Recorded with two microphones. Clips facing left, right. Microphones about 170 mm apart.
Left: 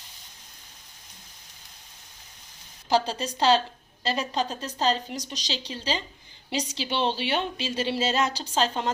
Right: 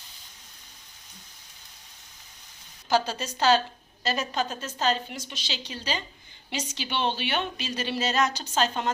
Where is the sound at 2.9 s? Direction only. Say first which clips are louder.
Left 1 dB; 30° left (ahead or behind).